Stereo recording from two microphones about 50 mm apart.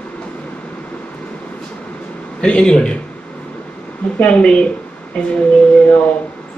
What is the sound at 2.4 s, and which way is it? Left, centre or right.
Speech, centre.